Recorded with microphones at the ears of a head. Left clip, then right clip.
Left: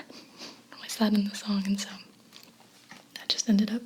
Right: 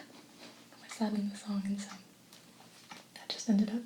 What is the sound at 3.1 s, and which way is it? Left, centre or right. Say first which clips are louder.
Whispering: left 8 dB; left.